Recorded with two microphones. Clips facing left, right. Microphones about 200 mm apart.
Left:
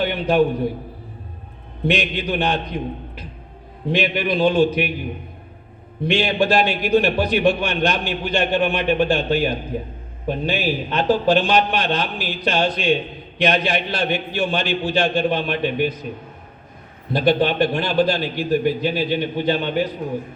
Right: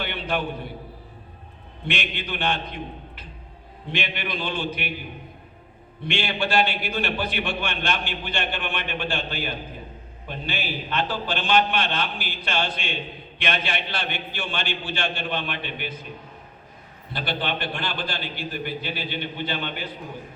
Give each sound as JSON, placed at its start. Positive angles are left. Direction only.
{"t": 0.0, "sound": "a man's voice", "side_deg": 40}
{"t": 1.9, "sound": "a man's voice", "side_deg": 40}
{"t": 3.9, "sound": "a man's voice", "side_deg": 40}
{"t": 6.1, "sound": "a man's voice", "side_deg": 40}
{"t": 17.2, "sound": "a man's voice", "side_deg": 40}